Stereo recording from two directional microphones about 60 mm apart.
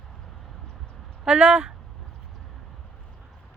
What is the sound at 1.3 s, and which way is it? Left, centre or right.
Speech, centre.